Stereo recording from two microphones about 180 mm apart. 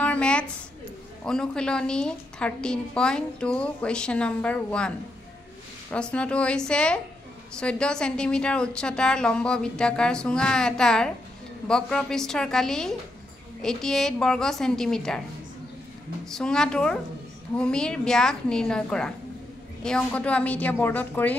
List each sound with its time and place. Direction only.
0.0 s a sound: 5° left (ahead or behind)
1.2 s a woman's voice: 5° left (ahead or behind)
16.3 s a woman's voice: 5° left (ahead or behind)